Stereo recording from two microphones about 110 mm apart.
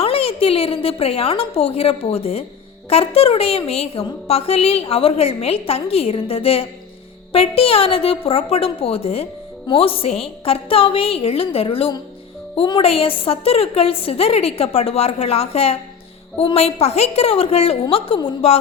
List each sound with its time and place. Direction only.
0.0 s a woman's voice: 60° left (ahead or behind)